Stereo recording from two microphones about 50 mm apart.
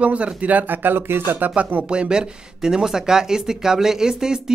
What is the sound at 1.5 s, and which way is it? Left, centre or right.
Speech, right.